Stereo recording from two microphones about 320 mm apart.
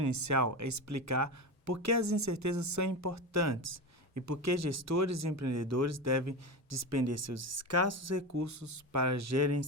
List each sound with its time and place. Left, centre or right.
0.1 s speech: right